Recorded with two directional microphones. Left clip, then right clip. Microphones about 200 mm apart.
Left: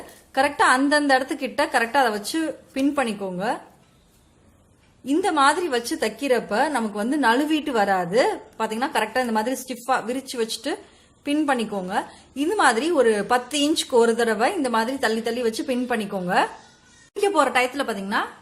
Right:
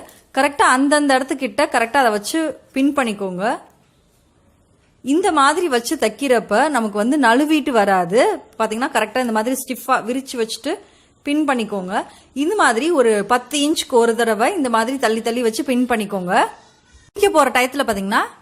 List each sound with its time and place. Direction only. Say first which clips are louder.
0.3 s a woman's voice: right 4 dB; 25° right (ahead or behind)
5.0 s a woman's voice: right 4 dB; 25° right (ahead or behind)